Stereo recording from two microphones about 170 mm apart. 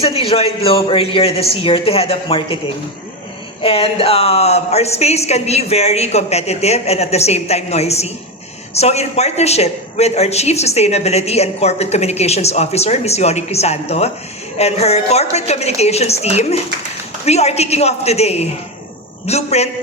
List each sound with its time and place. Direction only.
0.0 s a man's voice: 35° left (ahead or behind)